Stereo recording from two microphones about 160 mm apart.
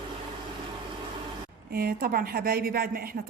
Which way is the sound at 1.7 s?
70° right (ahead or behind).